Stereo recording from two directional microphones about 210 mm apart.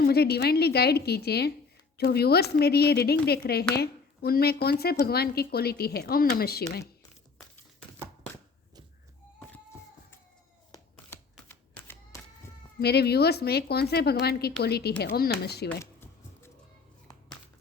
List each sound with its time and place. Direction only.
0.0 s speech: 50° left (ahead or behind)
10.9 s camera: 10° left (ahead or behind)
12.8 s speech: 50° left (ahead or behind)
15.8 s a sound: 10° left (ahead or behind)